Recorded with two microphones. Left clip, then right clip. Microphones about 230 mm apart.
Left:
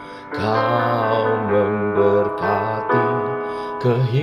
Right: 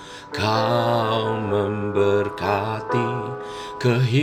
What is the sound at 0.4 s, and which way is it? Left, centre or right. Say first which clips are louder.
Music: left 2 dB; right.